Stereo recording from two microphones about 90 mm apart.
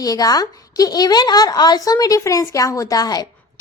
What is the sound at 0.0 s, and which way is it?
A woman's voice, 45° left (ahead or behind).